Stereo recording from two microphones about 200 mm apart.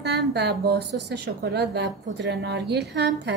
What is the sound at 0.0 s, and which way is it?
A woman's voice, 55° right (ahead or behind).